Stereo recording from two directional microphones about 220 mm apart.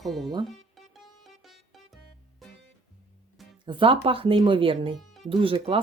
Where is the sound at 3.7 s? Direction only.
25° right (ahead or behind).